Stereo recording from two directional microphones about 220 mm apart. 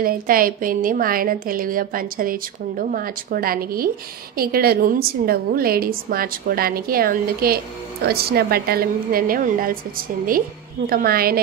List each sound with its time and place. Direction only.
0.0 s a woman's voice: 40° right (ahead or behind)